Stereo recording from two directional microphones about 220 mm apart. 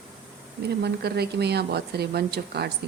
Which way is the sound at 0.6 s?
50° right (ahead or behind).